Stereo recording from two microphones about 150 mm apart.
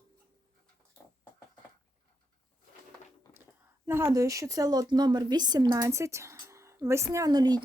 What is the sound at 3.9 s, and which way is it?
A woman's voice, 20° right (ahead or behind).